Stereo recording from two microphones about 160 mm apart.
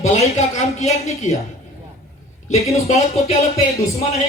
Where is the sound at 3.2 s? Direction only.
40° left (ahead or behind).